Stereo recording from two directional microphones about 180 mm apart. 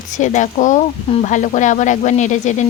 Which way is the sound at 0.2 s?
40° left (ahead or behind).